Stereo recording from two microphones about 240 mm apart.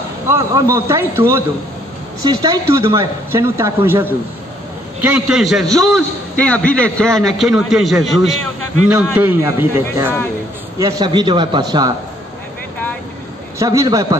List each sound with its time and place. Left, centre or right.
0.3 s a man's voice: centre
13.6 s speech: centre